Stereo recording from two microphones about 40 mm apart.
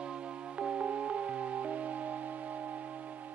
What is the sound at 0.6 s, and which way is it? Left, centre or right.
Music, right.